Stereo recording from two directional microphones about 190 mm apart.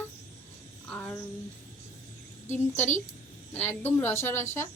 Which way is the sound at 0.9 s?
10° left (ahead or behind).